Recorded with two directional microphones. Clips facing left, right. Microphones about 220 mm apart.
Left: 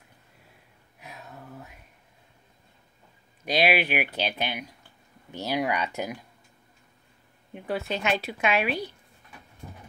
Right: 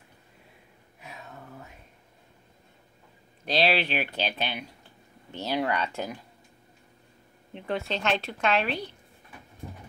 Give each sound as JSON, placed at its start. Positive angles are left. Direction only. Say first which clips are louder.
{"t": 1.0, "sound": "a sound", "louder": "left 1 dB", "side_deg": 5}
{"t": 3.4, "sound": "a woman's voice", "louder": "left 1 dB", "side_deg": 15}
{"t": 7.5, "sound": "a woman's voice", "louder": "left 1 dB", "side_deg": 5}